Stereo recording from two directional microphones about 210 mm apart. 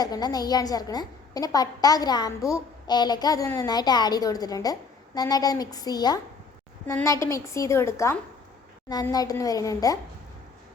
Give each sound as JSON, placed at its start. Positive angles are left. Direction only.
{"t": 0.0, "sound": "a woman's voice", "side_deg": 20}